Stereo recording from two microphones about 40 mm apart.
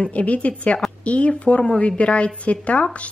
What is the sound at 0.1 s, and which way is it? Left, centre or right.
A woman's voice, left.